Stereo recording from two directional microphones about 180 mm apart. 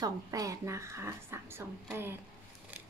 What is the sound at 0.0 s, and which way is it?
A woman's voice, 20° right (ahead or behind).